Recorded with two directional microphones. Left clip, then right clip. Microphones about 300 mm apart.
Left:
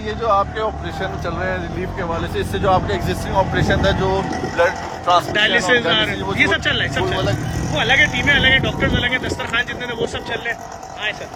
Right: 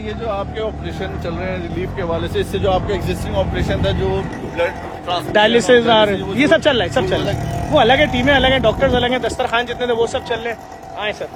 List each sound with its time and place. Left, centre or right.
0.3 s speech: centre
2.0 s speech: centre
5.3 s speech: centre
7.8 s speech: right
8.1 s speech: centre